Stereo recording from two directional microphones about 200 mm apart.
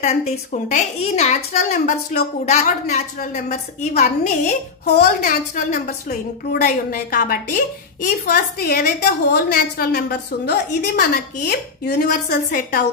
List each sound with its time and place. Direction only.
0.0 s a woman's voice: 35° left (ahead or behind)
4.8 s a woman's voice: 50° left (ahead or behind)
5.9 s a woman's voice: 50° left (ahead or behind)